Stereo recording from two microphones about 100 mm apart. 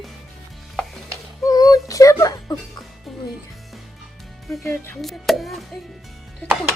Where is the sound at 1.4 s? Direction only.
40° left (ahead or behind).